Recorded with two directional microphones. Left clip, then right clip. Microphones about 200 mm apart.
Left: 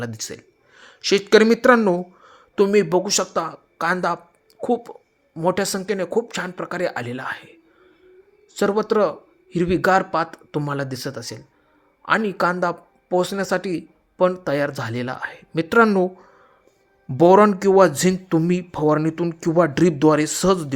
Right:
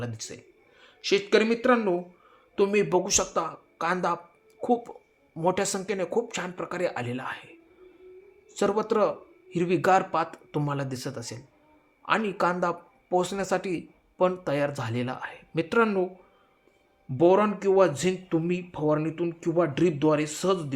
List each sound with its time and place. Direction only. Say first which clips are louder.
0.0 s speech: left 7 dB; 40° left (ahead or behind)
2.6 s speech: left 6 dB; 30° left (ahead or behind)
8.5 s speech: left 5 dB; 25° left (ahead or behind)
17.2 s speech: left 8 dB; 45° left (ahead or behind)